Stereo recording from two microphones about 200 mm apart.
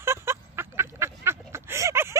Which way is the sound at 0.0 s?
10° right (ahead or behind).